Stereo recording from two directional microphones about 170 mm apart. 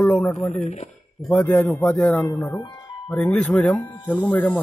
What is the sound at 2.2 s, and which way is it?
Speech, 15° left (ahead or behind).